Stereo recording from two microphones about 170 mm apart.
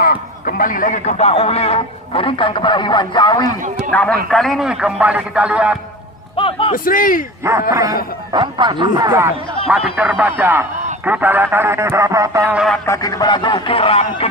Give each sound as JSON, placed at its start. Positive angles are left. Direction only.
{"t": 0.0, "sound": "a man's voice", "side_deg": 55}
{"t": 3.9, "sound": "speech", "side_deg": 5}
{"t": 6.3, "sound": "a sound", "side_deg": 30}
{"t": 6.7, "sound": "a man's voice", "side_deg": 55}
{"t": 7.7, "sound": "speech", "side_deg": -20}
{"t": 9.6, "sound": "speech", "side_deg": -5}
{"t": 12.5, "sound": "speech", "side_deg": 0}
{"t": 12.8, "sound": "speech", "side_deg": 20}